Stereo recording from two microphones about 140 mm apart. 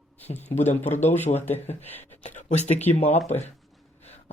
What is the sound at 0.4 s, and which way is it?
Speech, 55° left (ahead or behind).